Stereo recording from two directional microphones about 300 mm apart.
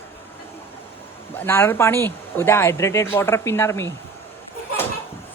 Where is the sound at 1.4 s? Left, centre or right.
Centre.